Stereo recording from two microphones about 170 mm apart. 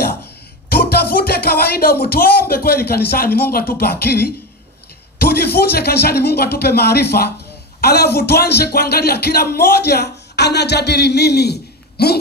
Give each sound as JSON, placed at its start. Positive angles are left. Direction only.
{"t": 0.7, "sound": "speech", "side_deg": 65}